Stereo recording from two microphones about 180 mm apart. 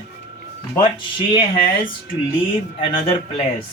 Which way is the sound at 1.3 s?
30° left (ahead or behind).